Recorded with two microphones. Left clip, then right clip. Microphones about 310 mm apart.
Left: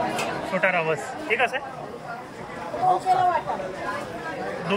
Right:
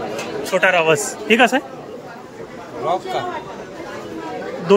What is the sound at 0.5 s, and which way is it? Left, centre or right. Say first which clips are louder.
Speech: right 8 dB; right.